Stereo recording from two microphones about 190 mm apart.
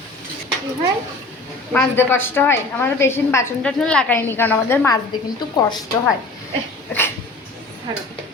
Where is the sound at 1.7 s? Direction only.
10° left (ahead or behind).